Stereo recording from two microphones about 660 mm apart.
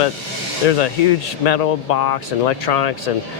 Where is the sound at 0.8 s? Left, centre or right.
Left.